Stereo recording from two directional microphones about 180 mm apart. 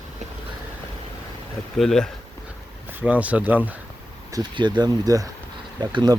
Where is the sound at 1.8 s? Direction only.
Centre (ahead or behind).